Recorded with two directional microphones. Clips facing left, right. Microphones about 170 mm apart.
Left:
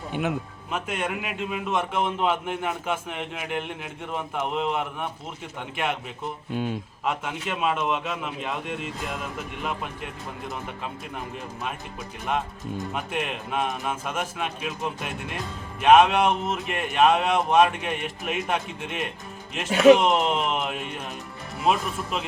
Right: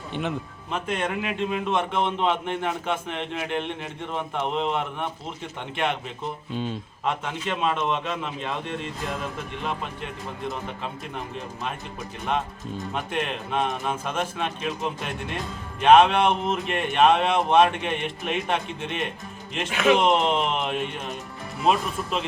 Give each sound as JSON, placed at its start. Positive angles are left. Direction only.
{"t": 0.1, "sound": "a man's voice", "side_deg": 5}
{"t": 12.3, "sound": "a man's voice", "side_deg": 5}
{"t": 15.8, "sound": "speech", "side_deg": 5}